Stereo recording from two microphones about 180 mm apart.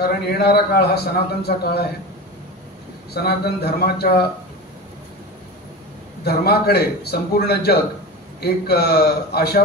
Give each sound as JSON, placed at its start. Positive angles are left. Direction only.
{"t": 0.3, "sound": "a man's voice", "side_deg": 65}
{"t": 3.2, "sound": "a man's voice", "side_deg": 65}
{"t": 6.2, "sound": "a man's voice", "side_deg": 60}